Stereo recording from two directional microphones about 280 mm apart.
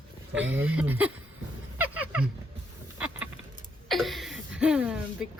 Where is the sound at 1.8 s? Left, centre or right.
Centre.